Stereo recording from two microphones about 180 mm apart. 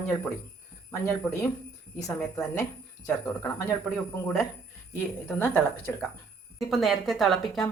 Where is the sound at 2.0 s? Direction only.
15° left (ahead or behind).